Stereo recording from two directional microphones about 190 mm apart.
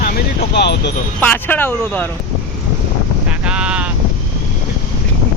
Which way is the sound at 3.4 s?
5° right (ahead or behind).